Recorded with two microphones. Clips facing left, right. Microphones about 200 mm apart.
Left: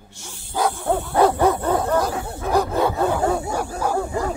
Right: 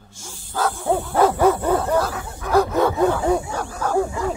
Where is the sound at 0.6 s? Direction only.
15° left (ahead or behind).